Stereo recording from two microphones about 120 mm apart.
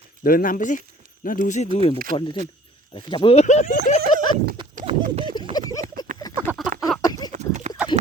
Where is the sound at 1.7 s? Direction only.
50° left (ahead or behind).